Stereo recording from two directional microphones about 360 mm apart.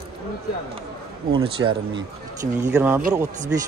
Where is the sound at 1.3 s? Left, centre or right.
Centre.